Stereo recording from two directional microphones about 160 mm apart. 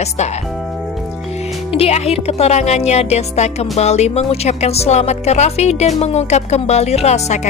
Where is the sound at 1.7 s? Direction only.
40° left (ahead or behind).